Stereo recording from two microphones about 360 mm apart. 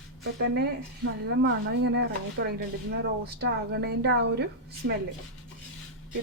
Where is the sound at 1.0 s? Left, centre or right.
Right.